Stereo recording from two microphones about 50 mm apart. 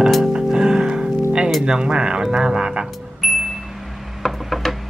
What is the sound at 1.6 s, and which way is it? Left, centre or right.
Speech, centre.